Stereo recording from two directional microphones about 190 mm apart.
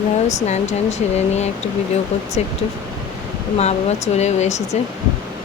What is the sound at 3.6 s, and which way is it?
Speech, 35° left (ahead or behind).